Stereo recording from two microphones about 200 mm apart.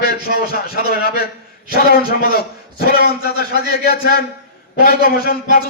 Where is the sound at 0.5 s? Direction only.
50° left (ahead or behind).